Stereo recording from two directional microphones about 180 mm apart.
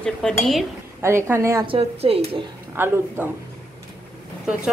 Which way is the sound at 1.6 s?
30° right (ahead or behind).